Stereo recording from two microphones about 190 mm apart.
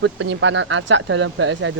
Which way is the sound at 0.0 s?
80° right.